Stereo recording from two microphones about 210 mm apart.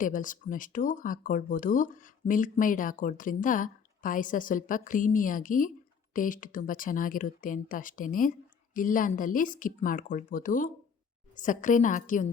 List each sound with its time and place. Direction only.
0.0 s speech: 40° left (ahead or behind)